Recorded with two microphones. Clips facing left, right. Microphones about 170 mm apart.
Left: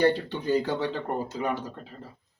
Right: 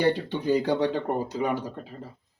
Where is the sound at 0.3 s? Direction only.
15° right (ahead or behind).